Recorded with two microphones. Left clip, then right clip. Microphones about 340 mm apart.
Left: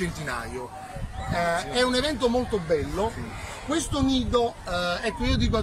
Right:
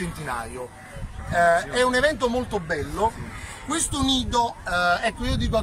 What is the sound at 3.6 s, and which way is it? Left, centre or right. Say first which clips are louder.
Speech: right 1 dB; right.